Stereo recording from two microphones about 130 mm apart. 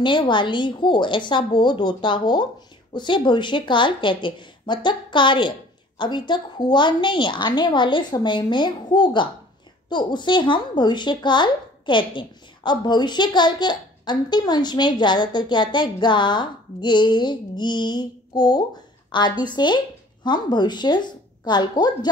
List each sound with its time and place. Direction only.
0.0 s a woman's voice: 40° left (ahead or behind)